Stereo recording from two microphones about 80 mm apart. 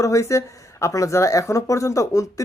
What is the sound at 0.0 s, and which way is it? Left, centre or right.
Speech, left.